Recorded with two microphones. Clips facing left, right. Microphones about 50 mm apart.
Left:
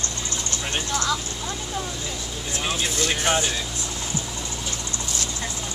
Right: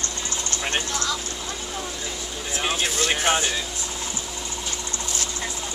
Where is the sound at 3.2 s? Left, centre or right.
Centre.